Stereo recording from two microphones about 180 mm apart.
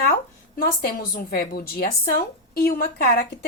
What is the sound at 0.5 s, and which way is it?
A woman's voice, 55° left (ahead or behind).